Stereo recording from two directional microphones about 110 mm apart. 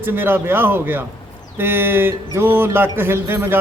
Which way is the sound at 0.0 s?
20° right (ahead or behind).